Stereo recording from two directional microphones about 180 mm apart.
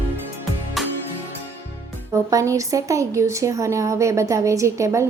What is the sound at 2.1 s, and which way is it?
Speech, 15° right (ahead or behind).